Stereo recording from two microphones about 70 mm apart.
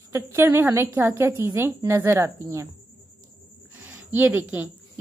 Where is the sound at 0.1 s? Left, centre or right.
Right.